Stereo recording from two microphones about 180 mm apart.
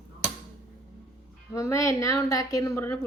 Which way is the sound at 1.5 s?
15° left (ahead or behind).